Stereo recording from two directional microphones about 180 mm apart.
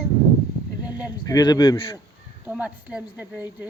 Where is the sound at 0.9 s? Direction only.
10° right (ahead or behind).